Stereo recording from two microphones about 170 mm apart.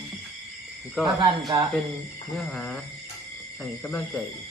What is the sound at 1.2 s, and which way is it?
Speech, 25° right (ahead or behind).